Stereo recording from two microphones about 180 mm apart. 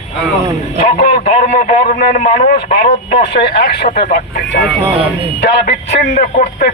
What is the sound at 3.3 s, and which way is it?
Speech, 65° left (ahead or behind).